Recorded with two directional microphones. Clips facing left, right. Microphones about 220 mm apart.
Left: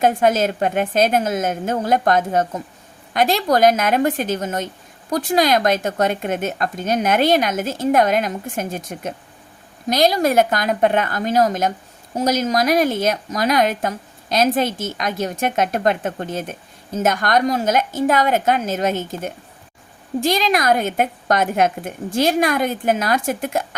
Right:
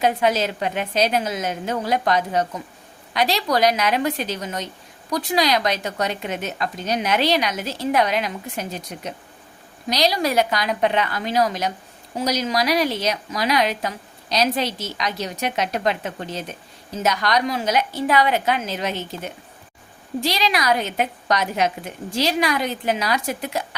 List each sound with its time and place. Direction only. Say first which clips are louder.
0.0 s a woman's voice: left 4 dB; 50° left (ahead or behind)